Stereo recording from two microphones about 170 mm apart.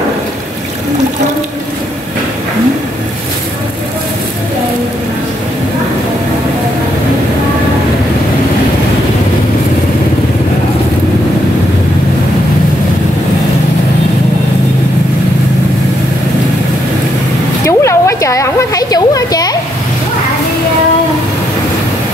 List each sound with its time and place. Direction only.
17.6 s children playing: 15° left (ahead or behind)